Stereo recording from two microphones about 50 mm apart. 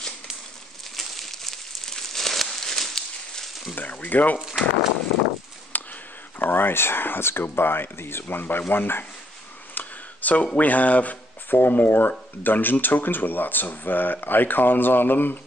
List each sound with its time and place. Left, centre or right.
0.9 s a sound: centre
3.7 s speech: left
4.4 s speech: centre
5.7 s sniff: left
6.4 s speech: left
9.8 s speech: left